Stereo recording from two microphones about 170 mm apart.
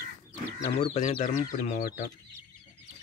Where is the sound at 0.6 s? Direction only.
40° left (ahead or behind).